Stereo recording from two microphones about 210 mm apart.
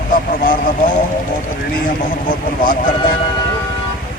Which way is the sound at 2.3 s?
40° left (ahead or behind).